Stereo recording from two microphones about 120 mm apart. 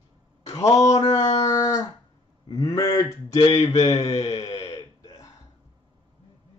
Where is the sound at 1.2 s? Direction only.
55° left (ahead or behind).